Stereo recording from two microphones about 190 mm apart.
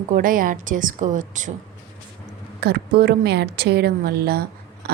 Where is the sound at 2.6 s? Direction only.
55° right (ahead or behind).